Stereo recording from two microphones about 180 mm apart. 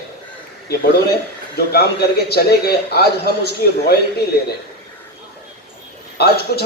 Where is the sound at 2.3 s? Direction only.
60° left (ahead or behind).